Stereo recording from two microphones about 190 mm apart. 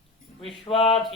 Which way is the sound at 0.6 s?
30° left (ahead or behind).